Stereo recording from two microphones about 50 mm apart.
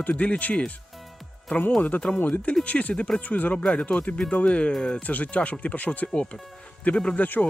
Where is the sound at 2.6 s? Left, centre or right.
Left.